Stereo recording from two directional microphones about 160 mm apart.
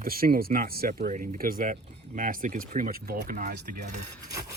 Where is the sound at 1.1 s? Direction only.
55° right (ahead or behind); by 3.7 s 75° right (ahead or behind).